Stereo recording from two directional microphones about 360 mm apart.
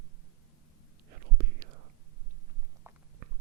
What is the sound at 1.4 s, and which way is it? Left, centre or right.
Whispering, right.